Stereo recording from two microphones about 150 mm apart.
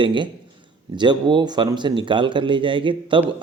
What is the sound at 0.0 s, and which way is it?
A man's voice, 30° right (ahead or behind).